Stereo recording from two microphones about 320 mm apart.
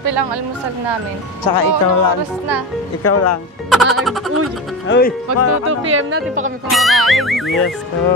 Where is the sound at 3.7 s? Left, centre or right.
Centre.